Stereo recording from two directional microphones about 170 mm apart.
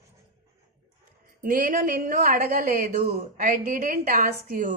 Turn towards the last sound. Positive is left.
turn(degrees=-55)  # may be behind; listen again after turning